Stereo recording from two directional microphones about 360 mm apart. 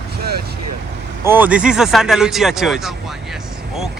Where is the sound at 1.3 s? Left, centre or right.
Centre.